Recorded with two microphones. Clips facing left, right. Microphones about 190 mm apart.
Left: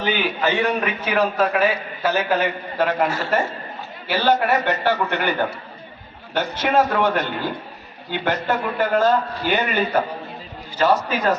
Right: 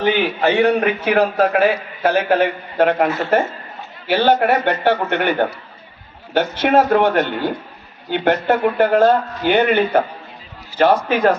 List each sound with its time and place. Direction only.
0.0 s a man's voice: 60° right (ahead or behind)